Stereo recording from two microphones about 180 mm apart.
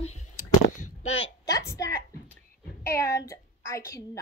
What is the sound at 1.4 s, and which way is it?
A woman's voice, 15° left (ahead or behind).